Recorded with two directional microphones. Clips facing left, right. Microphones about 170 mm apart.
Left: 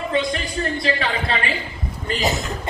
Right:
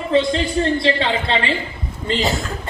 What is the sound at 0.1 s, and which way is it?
A man's voice, 25° right (ahead or behind).